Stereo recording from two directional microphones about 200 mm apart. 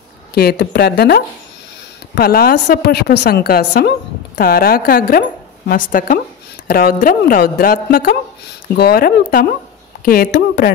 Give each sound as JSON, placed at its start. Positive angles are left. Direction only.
{"t": 0.3, "sound": "a woman's voice", "side_deg": 55}